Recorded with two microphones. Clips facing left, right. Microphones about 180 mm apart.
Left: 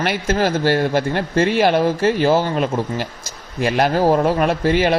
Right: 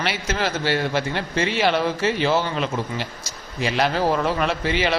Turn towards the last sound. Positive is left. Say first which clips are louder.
# left 6 dB
turn(degrees=50)  # may be behind; listen again after turning